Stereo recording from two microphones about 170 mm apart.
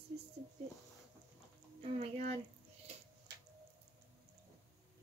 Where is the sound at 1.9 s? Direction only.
40° right (ahead or behind).